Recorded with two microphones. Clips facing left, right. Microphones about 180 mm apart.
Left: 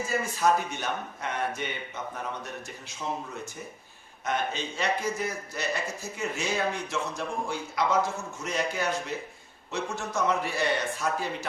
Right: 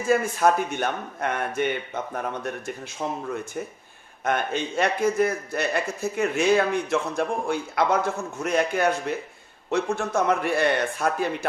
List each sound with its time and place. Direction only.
0.1 s a man's voice: 55° right (ahead or behind)
4.2 s a man's voice: 55° right (ahead or behind)